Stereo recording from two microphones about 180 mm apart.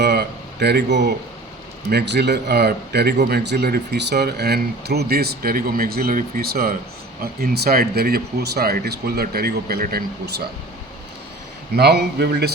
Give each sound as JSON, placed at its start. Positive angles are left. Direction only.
{"t": 0.0, "sound": "a sound", "side_deg": -65}
{"t": 1.9, "sound": "speech", "side_deg": -65}
{"t": 11.7, "sound": "speech", "side_deg": -65}